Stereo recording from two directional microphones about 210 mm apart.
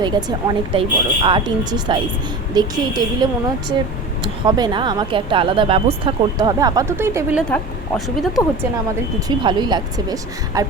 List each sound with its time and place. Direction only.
0.0 s speech: 20° right (ahead or behind)
7.5 s a woman's voice: centre (ahead or behind)
9.2 s speech: 20° right (ahead or behind)